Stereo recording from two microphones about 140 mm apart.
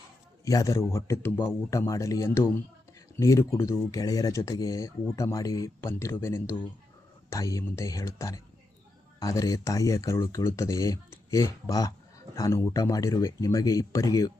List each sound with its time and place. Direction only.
0.4 s speech: 25° left (ahead or behind)